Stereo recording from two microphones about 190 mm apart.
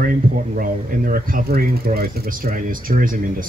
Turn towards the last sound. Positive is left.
turn(degrees=-45)  # may be behind; listen again after turning